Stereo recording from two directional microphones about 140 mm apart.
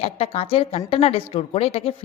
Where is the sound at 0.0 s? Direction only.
45° left (ahead or behind).